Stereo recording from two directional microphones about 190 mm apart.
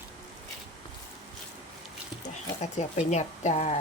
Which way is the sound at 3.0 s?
40° left (ahead or behind).